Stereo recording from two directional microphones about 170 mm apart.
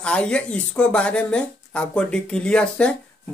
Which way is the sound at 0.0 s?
5° left (ahead or behind).